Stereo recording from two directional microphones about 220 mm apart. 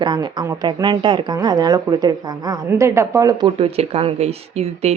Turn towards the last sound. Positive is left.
turn(degrees=-30)  # may be behind; listen again after turning